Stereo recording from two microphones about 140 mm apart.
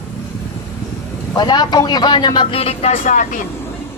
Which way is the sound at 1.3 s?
30° left (ahead or behind).